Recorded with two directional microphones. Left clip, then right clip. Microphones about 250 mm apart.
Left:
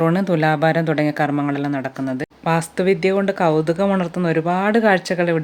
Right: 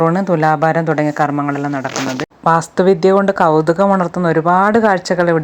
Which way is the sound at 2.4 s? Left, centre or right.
Centre.